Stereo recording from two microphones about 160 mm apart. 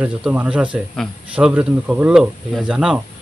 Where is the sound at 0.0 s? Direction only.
10° right (ahead or behind).